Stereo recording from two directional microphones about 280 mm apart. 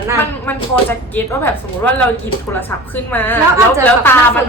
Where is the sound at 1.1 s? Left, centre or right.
Centre.